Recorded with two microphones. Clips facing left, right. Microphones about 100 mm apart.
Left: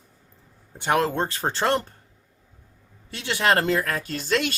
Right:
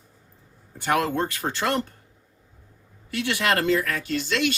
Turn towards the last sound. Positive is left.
turn(degrees=45)  # may be behind; listen again after turning